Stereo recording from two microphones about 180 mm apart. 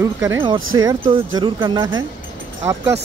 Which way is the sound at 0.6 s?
90° right.